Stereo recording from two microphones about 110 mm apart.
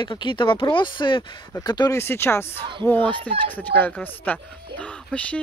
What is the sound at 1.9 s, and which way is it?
Speech, 20° left (ahead or behind).